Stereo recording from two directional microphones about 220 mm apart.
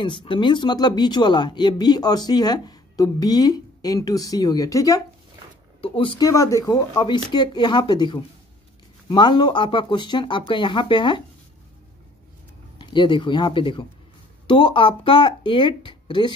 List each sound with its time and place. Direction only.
0.0 s speech: 20° left (ahead or behind)
12.7 s speech: 20° left (ahead or behind)